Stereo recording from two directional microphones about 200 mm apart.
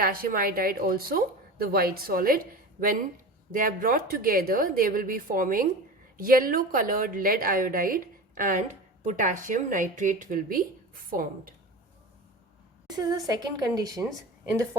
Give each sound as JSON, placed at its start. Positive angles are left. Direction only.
{"t": 0.0, "sound": "a woman's voice", "side_deg": -45}
{"t": 3.5, "sound": "a woman's voice", "side_deg": -45}
{"t": 12.9, "sound": "a woman's voice", "side_deg": -20}